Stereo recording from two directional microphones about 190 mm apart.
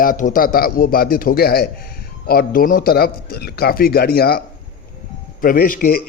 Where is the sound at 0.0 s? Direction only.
45° left (ahead or behind).